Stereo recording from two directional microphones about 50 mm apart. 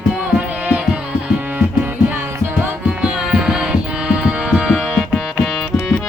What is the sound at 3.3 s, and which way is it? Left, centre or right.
Music, centre.